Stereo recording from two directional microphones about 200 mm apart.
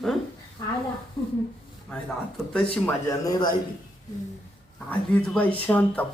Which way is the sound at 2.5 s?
15° left (ahead or behind).